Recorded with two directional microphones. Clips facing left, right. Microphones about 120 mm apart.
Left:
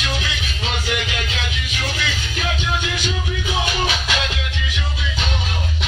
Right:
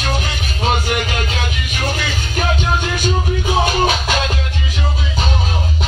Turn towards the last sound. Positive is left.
turn(degrees=-40)  # may be behind; listen again after turning